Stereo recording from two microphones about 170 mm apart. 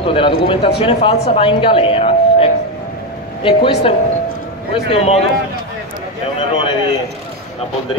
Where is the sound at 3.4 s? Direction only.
30° left (ahead or behind).